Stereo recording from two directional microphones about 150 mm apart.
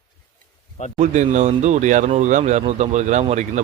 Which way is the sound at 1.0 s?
55° right (ahead or behind).